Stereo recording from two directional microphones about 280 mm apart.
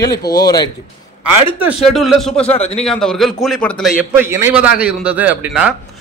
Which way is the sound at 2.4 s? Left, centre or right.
Left.